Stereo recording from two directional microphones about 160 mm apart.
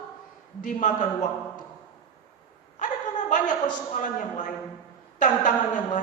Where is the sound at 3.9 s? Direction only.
50° left (ahead or behind).